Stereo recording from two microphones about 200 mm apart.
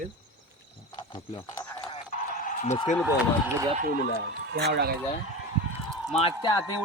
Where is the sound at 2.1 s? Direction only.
40° left (ahead or behind).